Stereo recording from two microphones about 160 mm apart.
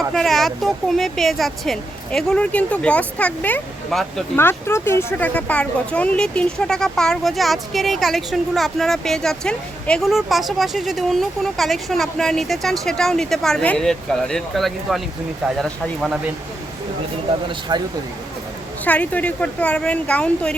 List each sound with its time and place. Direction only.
0.1 s speech: centre (ahead or behind)
17.7 s speech: 30° right (ahead or behind)
18.9 s a woman's voice: 10° left (ahead or behind)